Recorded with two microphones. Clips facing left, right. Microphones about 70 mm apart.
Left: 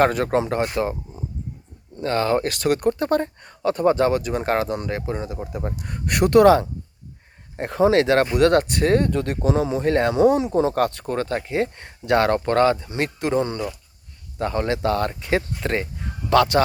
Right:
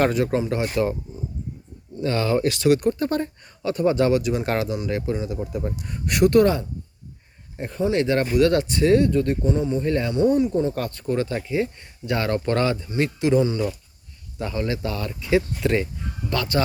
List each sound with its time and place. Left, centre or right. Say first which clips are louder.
0.0 s speech: left 2 dB; left
0.8 s speech: right 4 dB; left
2.0 s speech: left 1 dB; left
5.8 s speech: right 2 dB; left
7.7 s speech: left 5 dB; left
11.1 s speech: even; left
12.5 s speech: left 4 dB; left
12.9 s speech: right 2 dB; left
15.2 s speech: right 2 dB; left
16.3 s speech: left 7 dB; left